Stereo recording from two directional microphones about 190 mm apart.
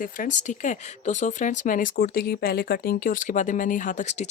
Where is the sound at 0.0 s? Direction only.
45° left (ahead or behind).